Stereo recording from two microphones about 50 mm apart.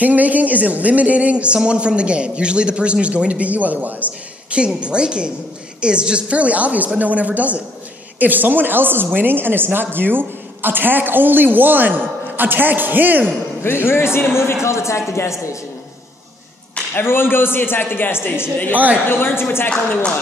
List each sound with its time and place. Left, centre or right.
0.0 s speech: right
4.5 s a woman's voice: right
13.6 s speech: left
16.9 s speech: left